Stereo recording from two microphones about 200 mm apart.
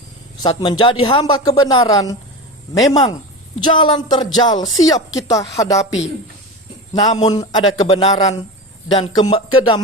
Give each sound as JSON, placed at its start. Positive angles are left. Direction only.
{"t": 0.4, "sound": "a man's voice", "side_deg": 20}
{"t": 6.9, "sound": "a man's voice", "side_deg": 20}